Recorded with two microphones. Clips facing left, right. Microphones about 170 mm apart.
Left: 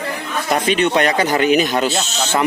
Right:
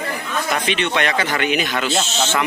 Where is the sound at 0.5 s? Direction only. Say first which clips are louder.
Left 6 dB; 40° left (ahead or behind).